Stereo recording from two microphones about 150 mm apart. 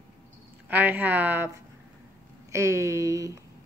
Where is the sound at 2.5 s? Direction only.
20° right (ahead or behind).